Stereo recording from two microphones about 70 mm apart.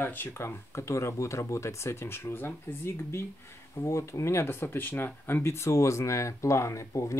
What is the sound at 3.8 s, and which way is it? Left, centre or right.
Speech, left.